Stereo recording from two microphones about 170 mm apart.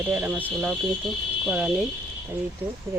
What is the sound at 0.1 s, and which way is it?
Speech, 10° right (ahead or behind).